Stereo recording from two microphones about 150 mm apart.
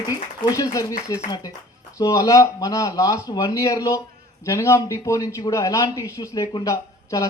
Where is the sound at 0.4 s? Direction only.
25° left (ahead or behind).